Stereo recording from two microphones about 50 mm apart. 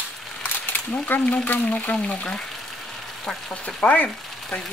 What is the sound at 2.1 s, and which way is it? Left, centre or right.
Speech, left.